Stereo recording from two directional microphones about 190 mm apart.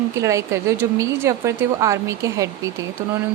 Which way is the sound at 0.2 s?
15° right (ahead or behind).